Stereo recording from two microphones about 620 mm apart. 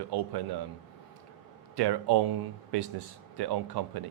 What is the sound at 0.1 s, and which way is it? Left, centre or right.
Speech, right.